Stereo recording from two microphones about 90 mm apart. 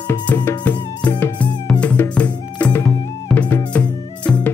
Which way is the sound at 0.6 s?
20° left (ahead or behind).